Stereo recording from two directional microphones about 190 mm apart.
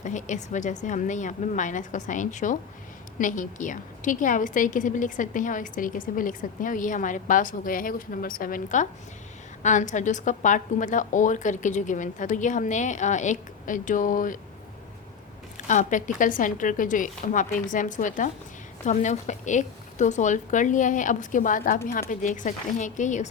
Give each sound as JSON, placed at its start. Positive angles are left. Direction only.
{"t": 0.0, "sound": "a woman's voice", "side_deg": 40}
{"t": 15.5, "sound": "a woman's voice", "side_deg": 40}